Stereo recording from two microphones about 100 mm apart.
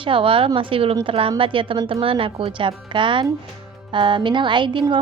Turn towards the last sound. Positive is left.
turn(degrees=-55)  # may be behind; listen again after turning